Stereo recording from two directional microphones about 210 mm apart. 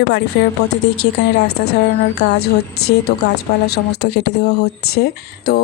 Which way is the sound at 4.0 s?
50° left (ahead or behind).